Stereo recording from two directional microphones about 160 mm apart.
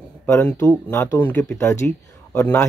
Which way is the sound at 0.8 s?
15° left (ahead or behind).